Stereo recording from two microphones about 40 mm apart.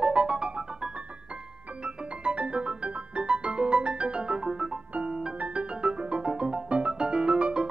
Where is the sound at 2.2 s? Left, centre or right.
Right.